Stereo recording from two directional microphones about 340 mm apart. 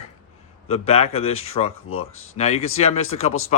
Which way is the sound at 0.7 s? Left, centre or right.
Centre.